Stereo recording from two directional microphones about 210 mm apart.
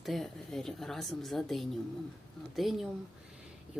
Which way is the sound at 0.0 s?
Centre (ahead or behind).